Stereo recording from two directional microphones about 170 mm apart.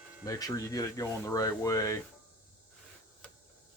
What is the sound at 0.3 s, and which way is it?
Speech, 20° left (ahead or behind).